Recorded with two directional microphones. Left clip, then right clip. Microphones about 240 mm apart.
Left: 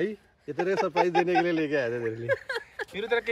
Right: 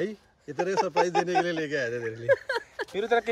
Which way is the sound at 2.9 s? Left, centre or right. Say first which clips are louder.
Right 2 dB; right.